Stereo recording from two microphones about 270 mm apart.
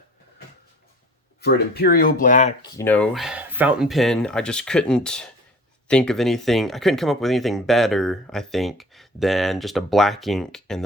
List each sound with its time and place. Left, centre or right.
1.4 s speech: left
2.6 s speech: centre